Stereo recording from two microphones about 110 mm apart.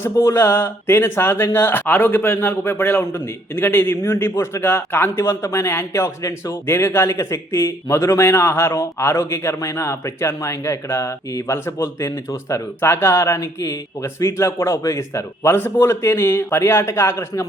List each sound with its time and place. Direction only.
0.0 s speech: 25° left (ahead or behind)